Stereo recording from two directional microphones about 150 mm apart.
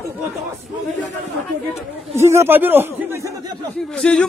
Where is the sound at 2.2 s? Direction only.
20° right (ahead or behind).